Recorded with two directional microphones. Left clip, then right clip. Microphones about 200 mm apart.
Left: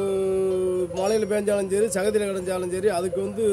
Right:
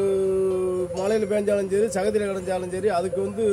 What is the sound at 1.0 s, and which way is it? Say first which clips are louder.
A man's voice: even; 50° left (ahead or behind).